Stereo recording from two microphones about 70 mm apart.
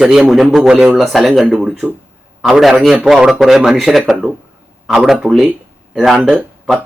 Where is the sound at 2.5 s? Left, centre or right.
Centre.